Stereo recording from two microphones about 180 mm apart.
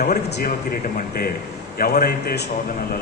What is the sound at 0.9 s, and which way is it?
A man's voice, 55° left (ahead or behind).